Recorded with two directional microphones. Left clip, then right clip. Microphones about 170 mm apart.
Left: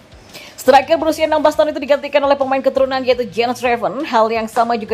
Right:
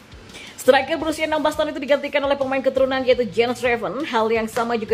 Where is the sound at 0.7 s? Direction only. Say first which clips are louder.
Left 6 dB; 25° left (ahead or behind).